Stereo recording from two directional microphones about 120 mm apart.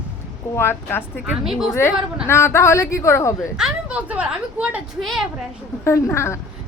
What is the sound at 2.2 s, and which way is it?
Speech, 20° left (ahead or behind).